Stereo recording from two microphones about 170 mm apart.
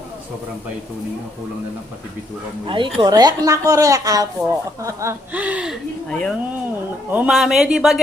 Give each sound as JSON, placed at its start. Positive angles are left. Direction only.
{"t": 2.6, "sound": "speech", "side_deg": -30}
{"t": 6.1, "sound": "speech", "side_deg": 5}